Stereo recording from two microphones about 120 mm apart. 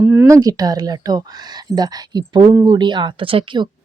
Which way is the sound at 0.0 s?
15° right (ahead or behind).